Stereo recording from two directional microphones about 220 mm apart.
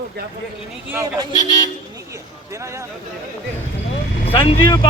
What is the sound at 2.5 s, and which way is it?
Speech, 15° right (ahead or behind).